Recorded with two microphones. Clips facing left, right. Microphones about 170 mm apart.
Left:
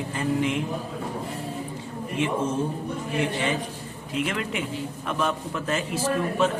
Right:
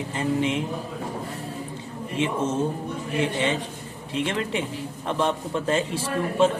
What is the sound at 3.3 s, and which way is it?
A man's voice, 25° right (ahead or behind).